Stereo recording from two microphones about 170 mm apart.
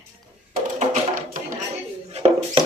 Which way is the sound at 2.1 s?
35° right (ahead or behind).